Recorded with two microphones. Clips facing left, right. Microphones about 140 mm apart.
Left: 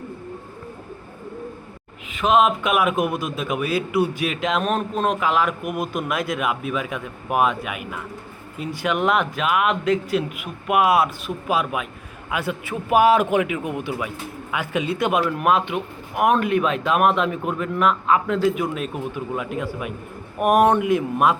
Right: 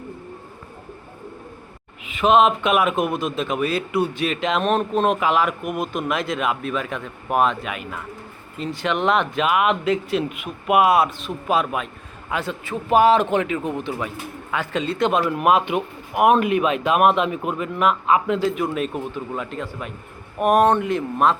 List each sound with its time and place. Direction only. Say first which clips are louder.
2.0 s a man's voice: right 2 dB; centre (ahead or behind)
15.2 s a man's voice: right 2 dB; 5° right (ahead or behind); by 21.3 s 10° left (ahead or behind)